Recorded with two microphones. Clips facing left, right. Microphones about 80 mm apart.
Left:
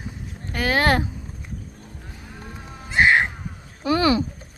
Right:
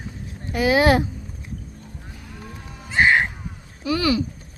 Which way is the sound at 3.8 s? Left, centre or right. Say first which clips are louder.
Left 2 dB; left.